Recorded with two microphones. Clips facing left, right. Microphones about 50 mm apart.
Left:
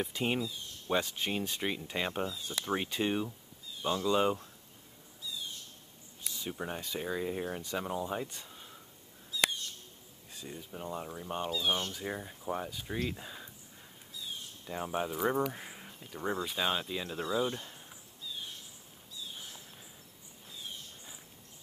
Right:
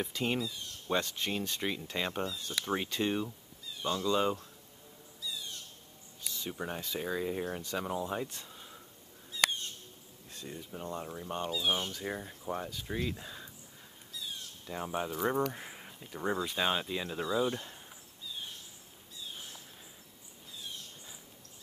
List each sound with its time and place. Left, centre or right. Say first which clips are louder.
0.0 s speech: even; centre
6.5 s speech: even; centre
9.3 s owl: right 1 dB; right
10.3 s speech: right 1 dB; centre
14.7 s speech: left 1 dB; centre
17.5 s a sound: right 2 dB; centre